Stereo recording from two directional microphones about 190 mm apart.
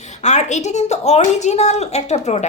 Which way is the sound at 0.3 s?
40° left (ahead or behind).